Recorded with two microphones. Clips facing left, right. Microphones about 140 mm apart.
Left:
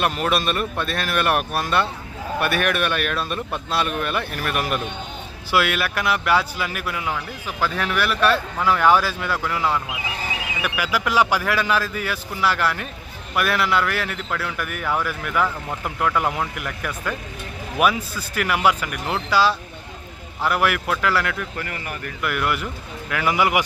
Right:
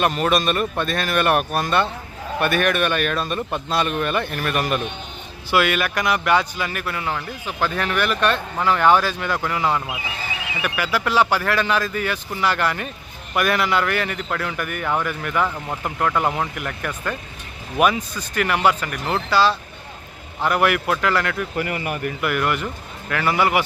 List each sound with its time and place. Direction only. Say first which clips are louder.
0.0 s speech: right 2 dB; 5° left (ahead or behind)
10.6 s speech: right 1 dB; 10° left (ahead or behind)
21.6 s speech: right 6 dB; 15° right (ahead or behind)
22.2 s speech: even; centre (ahead or behind)